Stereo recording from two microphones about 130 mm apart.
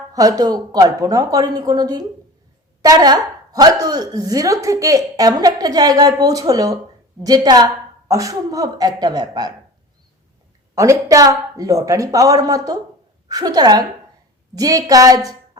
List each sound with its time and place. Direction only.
0.1 s speech: 30° right (ahead or behind)
10.8 s a woman's voice: 25° right (ahead or behind)